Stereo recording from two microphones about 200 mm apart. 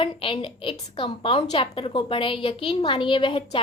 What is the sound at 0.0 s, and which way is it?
A woman's voice, 25° left (ahead or behind).